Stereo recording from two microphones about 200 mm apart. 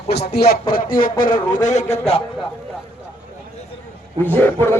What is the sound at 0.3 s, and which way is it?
Speech, 50° left (ahead or behind).